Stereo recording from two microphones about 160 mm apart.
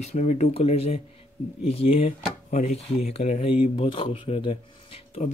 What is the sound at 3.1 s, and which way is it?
Speech, 40° left (ahead or behind).